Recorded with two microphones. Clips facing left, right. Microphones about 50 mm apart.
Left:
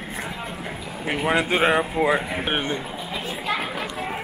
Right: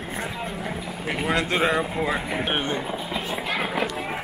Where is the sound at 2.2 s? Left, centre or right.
Centre.